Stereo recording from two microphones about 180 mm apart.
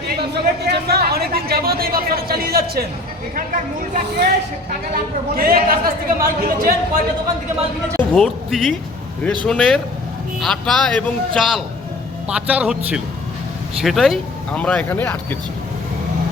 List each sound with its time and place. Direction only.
0.2 s speech: 65° right (ahead or behind)
5.3 s speech: 55° right (ahead or behind)
7.9 s a man's voice: centre (ahead or behind)